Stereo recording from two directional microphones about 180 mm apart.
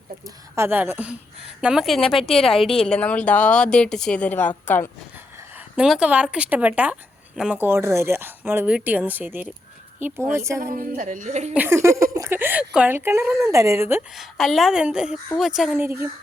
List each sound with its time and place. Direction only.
0.5 s speech: 10° right (ahead or behind); by 4.5 s 10° left (ahead or behind)
5.5 s speech: 5° right (ahead or behind)
10.6 s a woman's voice: 50° right (ahead or behind)
11.5 s speech: 10° right (ahead or behind)
14.2 s speech: centre (ahead or behind)
15.8 s speech: 15° right (ahead or behind)